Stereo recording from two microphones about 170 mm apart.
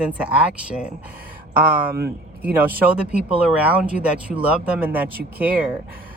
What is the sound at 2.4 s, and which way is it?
Speech, 10° right (ahead or behind).